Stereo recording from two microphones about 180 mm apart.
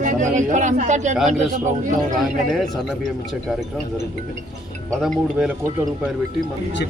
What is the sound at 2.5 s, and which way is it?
Speech, centre (ahead or behind).